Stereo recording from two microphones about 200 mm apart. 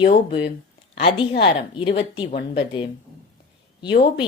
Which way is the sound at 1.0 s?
30° left (ahead or behind).